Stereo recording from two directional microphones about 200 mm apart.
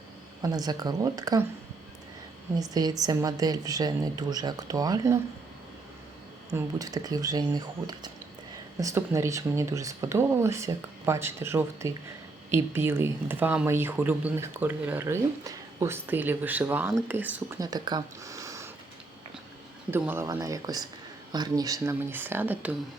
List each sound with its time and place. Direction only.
0.4 s speech: 20° right (ahead or behind)
2.6 s speech: 20° right (ahead or behind)
6.5 s speech: 20° right (ahead or behind)
17.6 s speech: 20° right (ahead or behind)
19.9 s speech: 10° right (ahead or behind)